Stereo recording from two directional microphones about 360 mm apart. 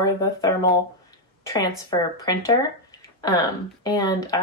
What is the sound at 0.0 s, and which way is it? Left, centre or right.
Speech, centre.